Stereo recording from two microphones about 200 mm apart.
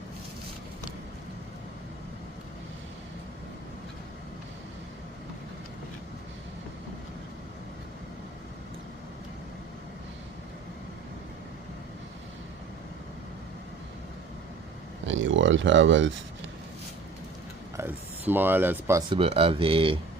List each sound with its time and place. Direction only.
15.0 s speech: 70° right (ahead or behind)
17.7 s speech: 10° right (ahead or behind)
19.2 s speech: 30° right (ahead or behind)